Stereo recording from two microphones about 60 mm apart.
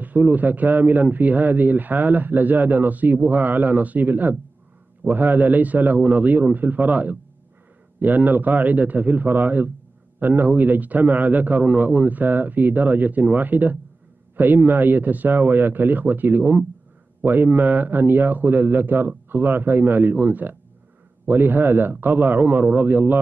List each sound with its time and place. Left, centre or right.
0.0 s a man's voice: right